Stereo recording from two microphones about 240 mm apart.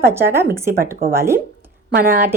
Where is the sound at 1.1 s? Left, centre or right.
Centre.